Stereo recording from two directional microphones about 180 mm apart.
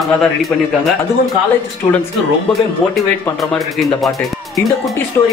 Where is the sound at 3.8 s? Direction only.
Centre (ahead or behind).